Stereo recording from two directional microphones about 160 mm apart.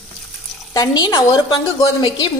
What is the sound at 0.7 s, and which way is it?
Speech, 25° left (ahead or behind).